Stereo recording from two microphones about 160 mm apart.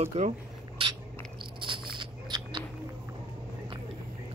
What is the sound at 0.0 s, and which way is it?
Speech, 40° right (ahead or behind).